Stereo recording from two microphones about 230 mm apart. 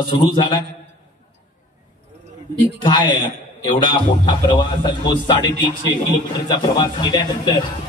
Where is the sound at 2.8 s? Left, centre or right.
Centre.